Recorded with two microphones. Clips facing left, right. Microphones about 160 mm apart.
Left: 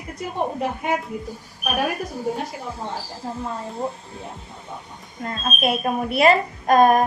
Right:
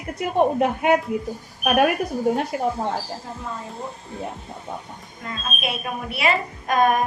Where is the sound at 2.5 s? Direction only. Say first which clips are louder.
Right 10 dB; 70° right (ahead or behind).